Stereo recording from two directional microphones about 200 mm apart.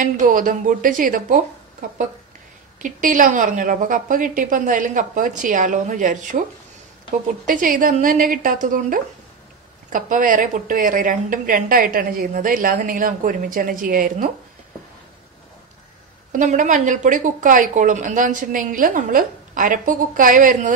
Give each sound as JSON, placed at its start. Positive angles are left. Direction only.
{"t": 0.0, "sound": "a woman's voice", "side_deg": -40}
{"t": 7.4, "sound": "a woman's voice", "side_deg": -45}
{"t": 16.3, "sound": "a woman's voice", "side_deg": -40}